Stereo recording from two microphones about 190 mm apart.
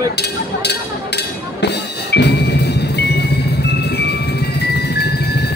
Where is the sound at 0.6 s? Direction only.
60° left (ahead or behind).